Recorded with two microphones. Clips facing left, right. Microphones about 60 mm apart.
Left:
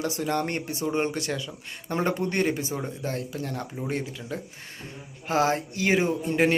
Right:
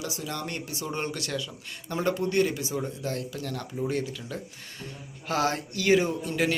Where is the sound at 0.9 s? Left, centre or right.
Left.